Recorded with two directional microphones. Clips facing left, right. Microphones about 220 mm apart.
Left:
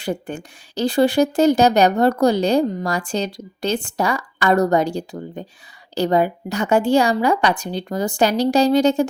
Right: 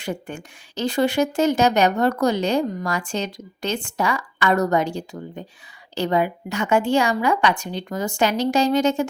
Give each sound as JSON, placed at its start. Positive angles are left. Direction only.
{"t": 0.0, "sound": "speech", "side_deg": 35}